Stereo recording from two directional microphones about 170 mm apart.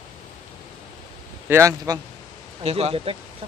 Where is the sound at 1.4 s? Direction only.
15° right (ahead or behind).